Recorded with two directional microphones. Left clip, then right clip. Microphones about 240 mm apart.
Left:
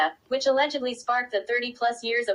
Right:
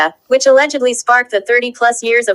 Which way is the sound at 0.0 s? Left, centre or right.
Right.